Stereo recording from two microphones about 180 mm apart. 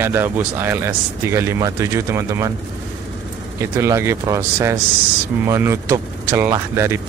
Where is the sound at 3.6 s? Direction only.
15° right (ahead or behind).